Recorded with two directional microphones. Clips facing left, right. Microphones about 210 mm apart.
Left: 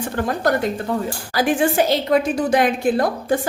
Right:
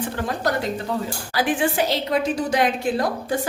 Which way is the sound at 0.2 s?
50° left (ahead or behind).